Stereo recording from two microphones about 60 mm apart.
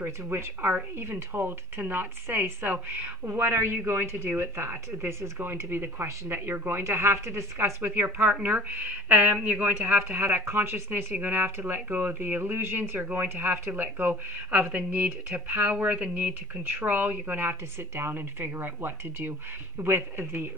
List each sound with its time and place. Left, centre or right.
0.3 s speech: right
7.5 s speech: right
17.7 s speech: right